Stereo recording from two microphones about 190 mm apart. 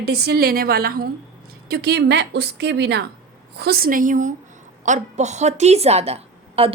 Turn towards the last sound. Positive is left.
turn(degrees=-30)  # may be behind; listen again after turning